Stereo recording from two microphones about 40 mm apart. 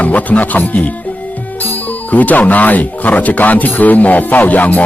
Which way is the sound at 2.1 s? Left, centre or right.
Left.